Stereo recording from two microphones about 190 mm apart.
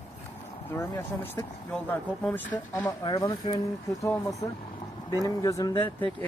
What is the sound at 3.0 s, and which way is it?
Speech, 20° left (ahead or behind).